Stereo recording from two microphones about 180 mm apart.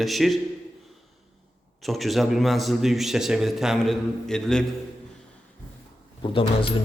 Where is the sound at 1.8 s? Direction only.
Centre (ahead or behind).